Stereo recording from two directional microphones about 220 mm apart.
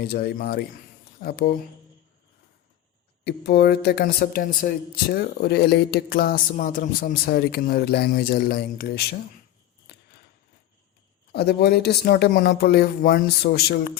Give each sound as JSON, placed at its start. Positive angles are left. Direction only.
{"t": 0.0, "sound": "speech", "side_deg": 45}
{"t": 3.2, "sound": "speech", "side_deg": 45}
{"t": 9.9, "sound": "scissors", "side_deg": 45}
{"t": 11.3, "sound": "speech", "side_deg": 45}